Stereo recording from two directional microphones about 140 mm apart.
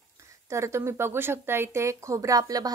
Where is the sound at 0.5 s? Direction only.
20° right (ahead or behind).